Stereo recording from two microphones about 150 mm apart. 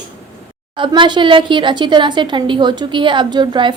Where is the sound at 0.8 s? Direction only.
30° right (ahead or behind).